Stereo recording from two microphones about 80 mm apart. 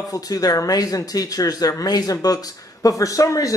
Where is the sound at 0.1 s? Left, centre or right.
Left.